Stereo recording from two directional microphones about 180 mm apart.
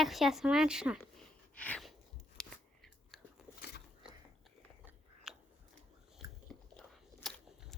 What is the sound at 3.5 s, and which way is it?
Biting, 65° left (ahead or behind).